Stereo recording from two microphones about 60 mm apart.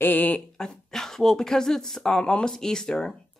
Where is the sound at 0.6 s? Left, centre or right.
Centre.